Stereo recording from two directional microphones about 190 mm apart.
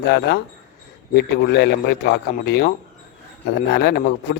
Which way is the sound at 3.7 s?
60° left (ahead or behind).